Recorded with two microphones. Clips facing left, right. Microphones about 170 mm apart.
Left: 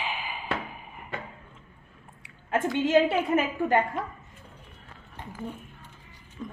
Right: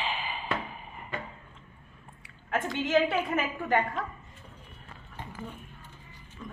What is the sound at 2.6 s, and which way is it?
A woman's voice, 15° left (ahead or behind).